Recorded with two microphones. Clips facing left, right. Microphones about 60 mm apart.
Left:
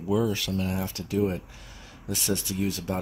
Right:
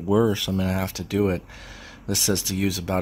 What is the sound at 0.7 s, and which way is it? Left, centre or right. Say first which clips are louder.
Speech: right 3 dB; right.